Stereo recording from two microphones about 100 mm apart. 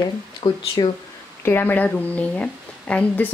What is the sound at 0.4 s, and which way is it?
Speech, 55° left (ahead or behind).